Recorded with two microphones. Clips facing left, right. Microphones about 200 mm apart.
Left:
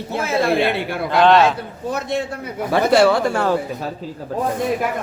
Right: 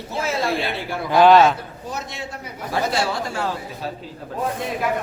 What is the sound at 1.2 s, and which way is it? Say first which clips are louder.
Speech: right 1 dB; centre (ahead or behind).